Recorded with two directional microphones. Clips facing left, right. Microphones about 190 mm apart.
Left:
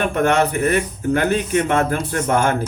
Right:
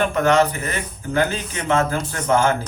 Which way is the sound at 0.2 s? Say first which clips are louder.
Left 1 dB; 55° left (ahead or behind).